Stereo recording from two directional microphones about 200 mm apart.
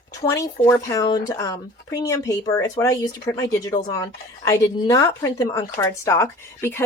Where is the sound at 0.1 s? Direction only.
15° left (ahead or behind).